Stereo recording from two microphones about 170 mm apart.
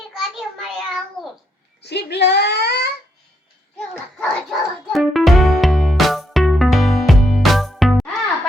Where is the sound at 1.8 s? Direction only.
80° left.